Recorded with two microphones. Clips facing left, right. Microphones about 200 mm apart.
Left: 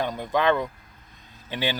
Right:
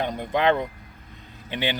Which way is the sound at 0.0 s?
20° right (ahead or behind).